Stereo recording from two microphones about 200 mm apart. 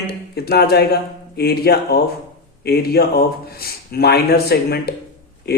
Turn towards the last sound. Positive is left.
turn(degrees=50)  # may be behind; listen again after turning